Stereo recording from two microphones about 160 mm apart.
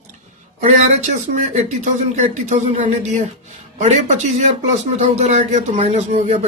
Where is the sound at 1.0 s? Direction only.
50° right (ahead or behind).